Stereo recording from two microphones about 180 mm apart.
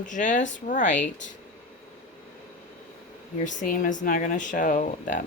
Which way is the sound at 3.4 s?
45° left (ahead or behind).